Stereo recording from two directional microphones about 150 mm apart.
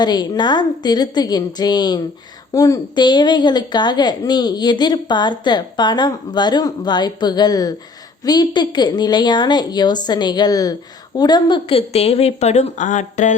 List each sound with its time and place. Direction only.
0.0 s a woman's voice: 30° left (ahead or behind); by 13.3 s 55° left (ahead or behind)